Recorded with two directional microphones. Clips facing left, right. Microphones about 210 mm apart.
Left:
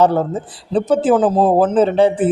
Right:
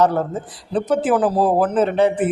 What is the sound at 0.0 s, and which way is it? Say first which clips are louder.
A man's voice: left 3 dB; 30° left (ahead or behind).